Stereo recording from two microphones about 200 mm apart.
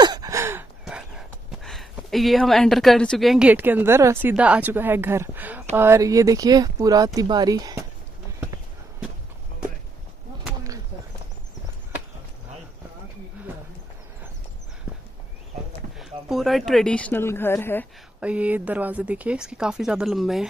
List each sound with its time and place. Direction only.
0.0 s speech: 20° right (ahead or behind)
16.0 s speech: centre (ahead or behind)
18.2 s speech: 5° right (ahead or behind)